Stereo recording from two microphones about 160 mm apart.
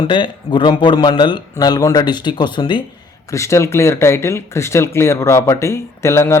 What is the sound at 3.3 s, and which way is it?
Speech, 20° left (ahead or behind).